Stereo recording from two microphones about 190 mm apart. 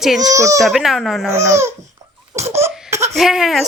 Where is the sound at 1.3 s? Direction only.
15° right (ahead or behind).